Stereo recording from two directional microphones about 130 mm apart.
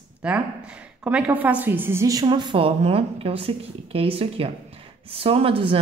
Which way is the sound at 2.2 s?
35° right (ahead or behind).